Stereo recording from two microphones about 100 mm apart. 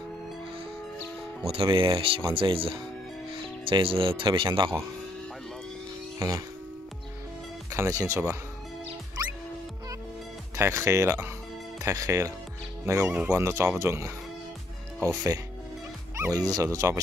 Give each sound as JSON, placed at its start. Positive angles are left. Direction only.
{"t": 1.4, "sound": "speech", "side_deg": -65}
{"t": 4.3, "sound": "speech", "side_deg": -50}
{"t": 6.1, "sound": "speech", "side_deg": -35}
{"t": 7.7, "sound": "speech", "side_deg": -30}
{"t": 9.2, "sound": "music", "side_deg": -35}
{"t": 10.5, "sound": "speech", "side_deg": -25}
{"t": 13.1, "sound": "speech", "side_deg": -20}